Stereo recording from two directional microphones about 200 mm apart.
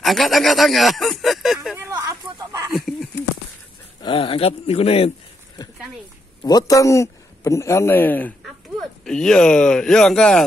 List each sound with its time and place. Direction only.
0.0 s speech: centre (ahead or behind)
1.9 s a sound: 15° right (ahead or behind)
4.0 s speech: 25° left (ahead or behind)
6.4 s a man's voice: 20° left (ahead or behind)